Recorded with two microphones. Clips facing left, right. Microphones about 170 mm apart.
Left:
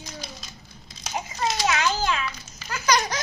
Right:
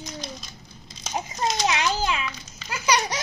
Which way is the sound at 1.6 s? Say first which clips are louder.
Left 1 dB; 20° right (ahead or behind).